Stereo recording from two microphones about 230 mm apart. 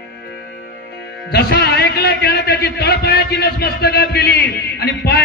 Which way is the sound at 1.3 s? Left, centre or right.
Left.